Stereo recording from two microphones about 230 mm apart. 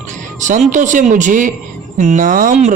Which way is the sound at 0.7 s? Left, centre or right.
Right.